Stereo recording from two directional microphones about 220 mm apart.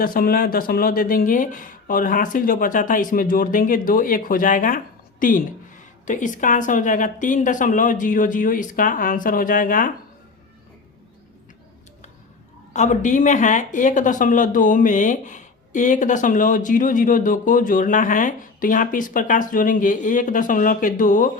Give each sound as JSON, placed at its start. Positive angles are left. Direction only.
{"t": 0.0, "sound": "speech", "side_deg": 40}
{"t": 12.7, "sound": "speech", "side_deg": 35}